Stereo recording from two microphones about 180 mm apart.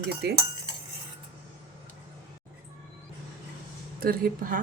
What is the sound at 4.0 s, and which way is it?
Speech, 55° right (ahead or behind).